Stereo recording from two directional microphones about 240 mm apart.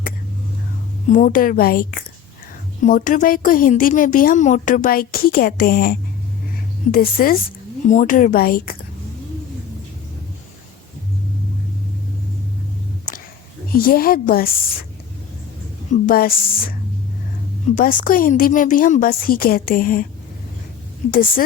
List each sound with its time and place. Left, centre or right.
1.0 s a woman's voice: left
13.1 s a sound: left
13.7 s a woman's voice: left
15.9 s a woman's voice: left
17.7 s a woman's voice: left
21.1 s a woman's voice: left